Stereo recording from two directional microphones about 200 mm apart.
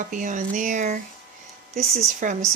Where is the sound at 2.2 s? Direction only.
40° right (ahead or behind).